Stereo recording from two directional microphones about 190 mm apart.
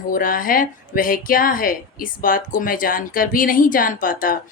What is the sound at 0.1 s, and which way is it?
A woman's voice, 45° left (ahead or behind).